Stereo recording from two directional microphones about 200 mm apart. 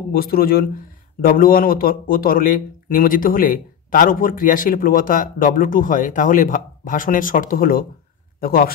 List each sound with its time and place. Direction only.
0.1 s speech: 45° left (ahead or behind)